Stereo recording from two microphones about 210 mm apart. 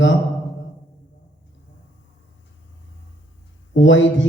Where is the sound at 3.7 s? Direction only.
65° left (ahead or behind).